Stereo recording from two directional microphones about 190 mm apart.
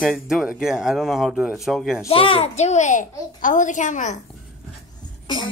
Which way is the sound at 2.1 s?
30° left (ahead or behind).